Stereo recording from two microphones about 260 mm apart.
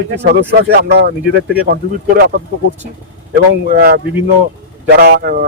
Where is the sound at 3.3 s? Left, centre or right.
Right.